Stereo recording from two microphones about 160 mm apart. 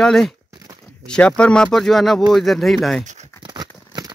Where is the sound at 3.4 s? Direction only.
25° right (ahead or behind).